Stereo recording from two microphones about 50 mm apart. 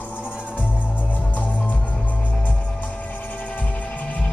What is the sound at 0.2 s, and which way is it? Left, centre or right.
Music, right.